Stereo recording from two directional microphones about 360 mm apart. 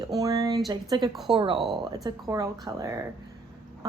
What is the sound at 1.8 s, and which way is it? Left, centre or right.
A woman's voice, centre.